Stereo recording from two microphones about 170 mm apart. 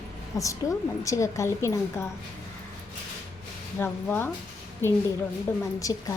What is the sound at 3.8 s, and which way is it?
Speech, 10° left (ahead or behind).